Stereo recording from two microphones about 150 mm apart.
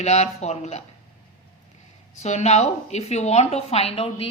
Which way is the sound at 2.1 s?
50° left (ahead or behind).